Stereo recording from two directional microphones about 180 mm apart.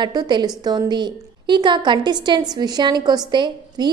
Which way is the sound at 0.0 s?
25° right (ahead or behind).